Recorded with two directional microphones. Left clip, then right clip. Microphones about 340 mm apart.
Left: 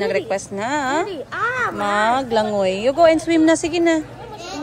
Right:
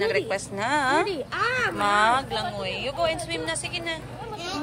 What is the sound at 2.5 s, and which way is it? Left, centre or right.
Speech, left.